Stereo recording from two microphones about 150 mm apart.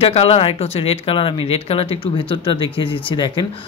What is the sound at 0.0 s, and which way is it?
Speech, 40° left (ahead or behind).